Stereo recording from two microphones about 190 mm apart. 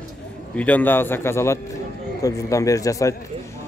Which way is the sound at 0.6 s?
10° left (ahead or behind).